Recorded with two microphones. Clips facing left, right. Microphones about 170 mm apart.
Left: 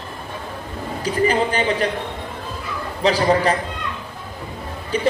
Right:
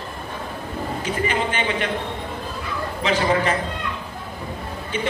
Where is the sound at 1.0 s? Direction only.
35° left (ahead or behind).